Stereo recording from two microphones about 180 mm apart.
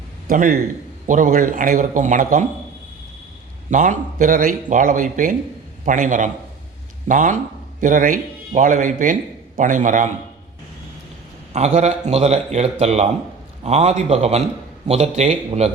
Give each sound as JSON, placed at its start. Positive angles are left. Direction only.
{"t": 0.3, "sound": "speech", "side_deg": -50}
{"t": 3.7, "sound": "speech", "side_deg": -45}
{"t": 11.5, "sound": "a man's voice", "side_deg": -40}